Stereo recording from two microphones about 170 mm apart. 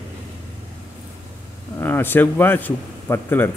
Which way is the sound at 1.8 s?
10° left (ahead or behind).